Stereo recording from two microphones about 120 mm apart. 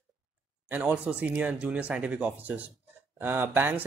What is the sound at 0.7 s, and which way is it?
A man's voice, 15° right (ahead or behind).